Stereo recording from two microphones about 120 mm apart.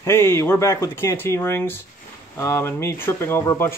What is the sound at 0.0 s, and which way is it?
Speech, 20° left (ahead or behind).